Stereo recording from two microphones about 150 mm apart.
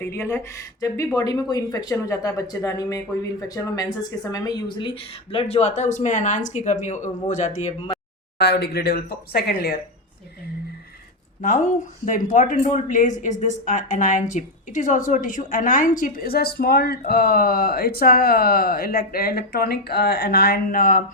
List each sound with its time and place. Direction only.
0.0 s speech: 15° left (ahead or behind); by 7.7 s 55° left (ahead or behind)
8.4 s speech: 90° left
11.4 s a woman's voice: 60° left (ahead or behind)